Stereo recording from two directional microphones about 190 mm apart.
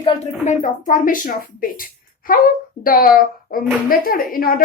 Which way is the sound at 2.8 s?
50° left (ahead or behind).